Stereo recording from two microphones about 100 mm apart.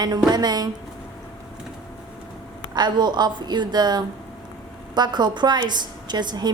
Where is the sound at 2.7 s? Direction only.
45° right (ahead or behind).